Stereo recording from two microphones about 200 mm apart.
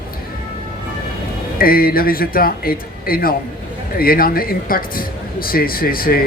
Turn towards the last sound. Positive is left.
turn(degrees=45)  # may be behind; listen again after turning